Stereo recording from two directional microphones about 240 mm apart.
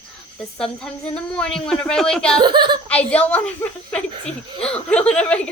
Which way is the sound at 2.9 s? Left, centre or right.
Centre.